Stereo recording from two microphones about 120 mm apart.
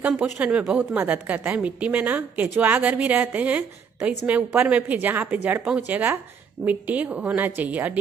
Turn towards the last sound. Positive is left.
turn(degrees=-15)  # may be behind; listen again after turning